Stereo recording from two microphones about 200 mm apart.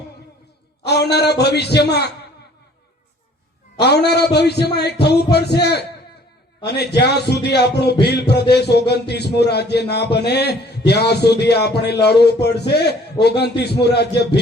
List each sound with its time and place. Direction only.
0.9 s a man's voice: 55° left (ahead or behind)
3.8 s a man's voice: 55° left (ahead or behind)